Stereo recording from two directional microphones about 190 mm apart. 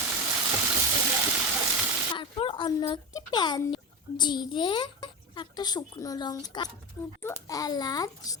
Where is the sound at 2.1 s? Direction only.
25° left (ahead or behind).